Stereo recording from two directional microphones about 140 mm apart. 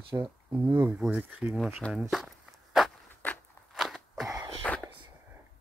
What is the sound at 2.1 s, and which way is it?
Walk, centre (ahead or behind).